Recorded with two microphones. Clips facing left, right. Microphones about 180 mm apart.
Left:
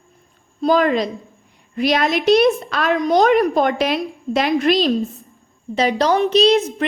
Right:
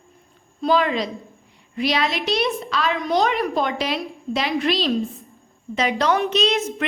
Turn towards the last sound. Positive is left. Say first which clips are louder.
# left 7 dB
turn(degrees=35)  # may be behind; listen again after turning